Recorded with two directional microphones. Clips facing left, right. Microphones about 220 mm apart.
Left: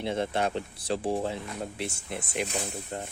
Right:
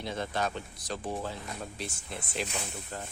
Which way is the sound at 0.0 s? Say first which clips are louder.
Left 5 dB; 25° left (ahead or behind).